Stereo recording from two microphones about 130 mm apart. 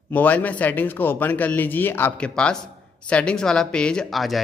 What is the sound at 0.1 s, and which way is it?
Speech, 10° left (ahead or behind).